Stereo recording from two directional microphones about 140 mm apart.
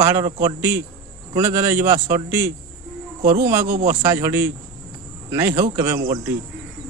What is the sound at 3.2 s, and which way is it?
Speech, 65° right (ahead or behind).